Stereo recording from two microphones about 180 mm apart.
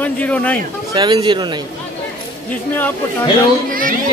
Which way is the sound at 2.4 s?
10° left (ahead or behind).